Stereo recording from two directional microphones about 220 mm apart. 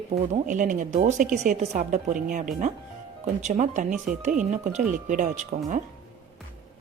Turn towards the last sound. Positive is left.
turn(degrees=-35)  # may be behind; listen again after turning